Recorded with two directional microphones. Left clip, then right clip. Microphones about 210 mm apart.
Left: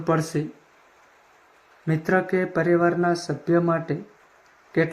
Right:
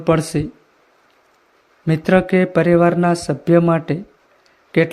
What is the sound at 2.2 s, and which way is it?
Speech, 90° right.